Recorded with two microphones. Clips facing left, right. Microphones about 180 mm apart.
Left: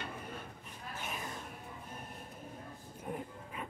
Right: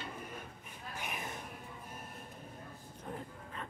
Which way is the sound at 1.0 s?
15° right (ahead or behind).